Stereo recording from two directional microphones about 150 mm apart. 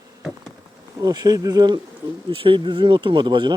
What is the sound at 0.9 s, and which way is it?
Speech, 25° right (ahead or behind).